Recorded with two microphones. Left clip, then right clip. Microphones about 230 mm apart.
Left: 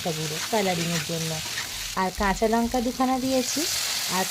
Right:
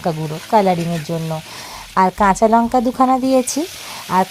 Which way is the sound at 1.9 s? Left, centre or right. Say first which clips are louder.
Right 12 dB; right.